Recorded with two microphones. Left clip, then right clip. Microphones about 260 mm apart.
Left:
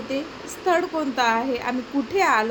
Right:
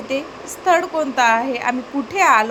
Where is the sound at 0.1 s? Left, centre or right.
Centre.